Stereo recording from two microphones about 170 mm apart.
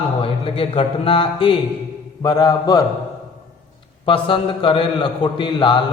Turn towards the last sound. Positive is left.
turn(degrees=30)  # may be behind; listen again after turning